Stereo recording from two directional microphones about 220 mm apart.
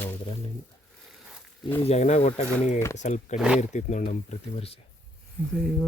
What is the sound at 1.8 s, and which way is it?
Speech, 30° left (ahead or behind).